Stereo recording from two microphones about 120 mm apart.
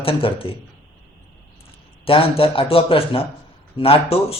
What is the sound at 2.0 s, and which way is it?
A man's voice, 50° left (ahead or behind).